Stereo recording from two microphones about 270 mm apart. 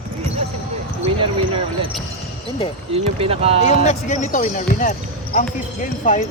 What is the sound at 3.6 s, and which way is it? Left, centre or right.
Speech, left.